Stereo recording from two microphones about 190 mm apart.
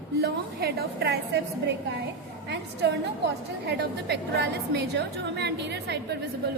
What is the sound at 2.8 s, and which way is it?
A woman's voice, 65° right (ahead or behind).